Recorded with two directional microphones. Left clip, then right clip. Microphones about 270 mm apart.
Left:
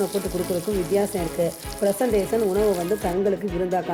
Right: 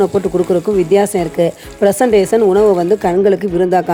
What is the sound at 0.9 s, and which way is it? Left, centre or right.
Frying, right.